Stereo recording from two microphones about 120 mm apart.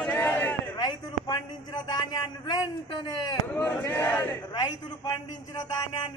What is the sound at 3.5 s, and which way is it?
Speech, 15° left (ahead or behind).